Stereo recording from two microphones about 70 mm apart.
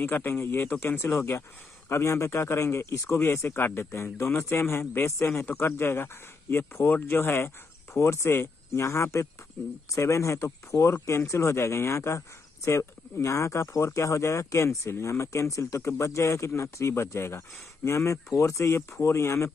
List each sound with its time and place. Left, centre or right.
0.0 s speech: left